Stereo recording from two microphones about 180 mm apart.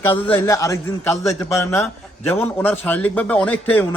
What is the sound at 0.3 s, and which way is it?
A man's voice, 15° left (ahead or behind).